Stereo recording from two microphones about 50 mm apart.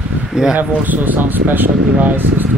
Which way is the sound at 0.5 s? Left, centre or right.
Right.